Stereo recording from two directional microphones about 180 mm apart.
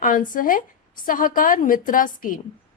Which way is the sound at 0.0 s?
50° left (ahead or behind).